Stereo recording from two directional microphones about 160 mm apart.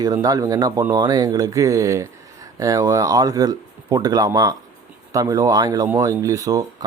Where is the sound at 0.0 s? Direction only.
25° right (ahead or behind).